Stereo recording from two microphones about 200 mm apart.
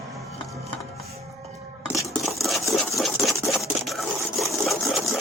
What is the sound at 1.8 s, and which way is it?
Coin, 15° left (ahead or behind).